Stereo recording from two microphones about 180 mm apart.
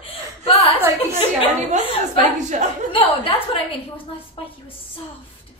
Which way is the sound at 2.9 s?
30° left (ahead or behind).